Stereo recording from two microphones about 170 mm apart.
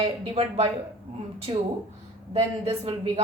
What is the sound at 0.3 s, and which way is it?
A woman's voice, 40° right (ahead or behind).